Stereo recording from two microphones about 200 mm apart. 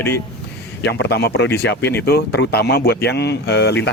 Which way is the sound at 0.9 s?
60° left (ahead or behind).